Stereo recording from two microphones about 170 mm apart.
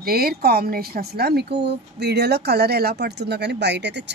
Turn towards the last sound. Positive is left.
turn(degrees=-90)